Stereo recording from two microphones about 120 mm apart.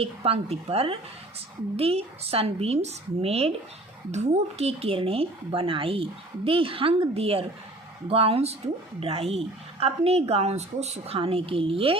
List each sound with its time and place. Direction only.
0.0 s a woman's voice: 55° right (ahead or behind)